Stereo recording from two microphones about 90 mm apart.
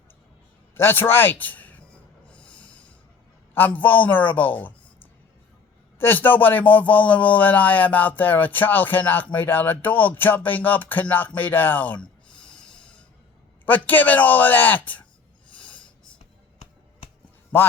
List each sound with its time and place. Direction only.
0.7 s a man's voice: 25° left (ahead or behind)
2.3 s a sound: 15° left (ahead or behind)
3.5 s a man's voice: 20° left (ahead or behind)
6.0 s a man's voice: 25° left (ahead or behind)
12.5 s snort: 10° left (ahead or behind)
13.7 s a man's voice: 20° left (ahead or behind)
15.5 s snort: 15° left (ahead or behind)